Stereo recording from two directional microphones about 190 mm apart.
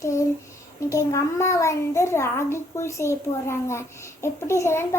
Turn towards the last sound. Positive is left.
turn(degrees=15)  # may be behind; listen again after turning